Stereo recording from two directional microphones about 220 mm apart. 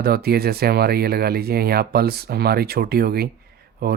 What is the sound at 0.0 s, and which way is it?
Speech, 45° right (ahead or behind).